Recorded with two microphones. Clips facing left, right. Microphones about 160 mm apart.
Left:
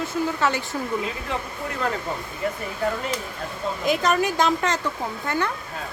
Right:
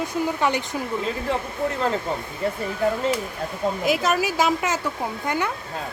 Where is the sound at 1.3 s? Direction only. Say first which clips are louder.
Right 4 dB; 30° right (ahead or behind).